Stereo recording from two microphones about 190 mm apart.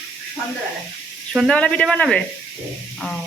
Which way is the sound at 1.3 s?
Centre (ahead or behind).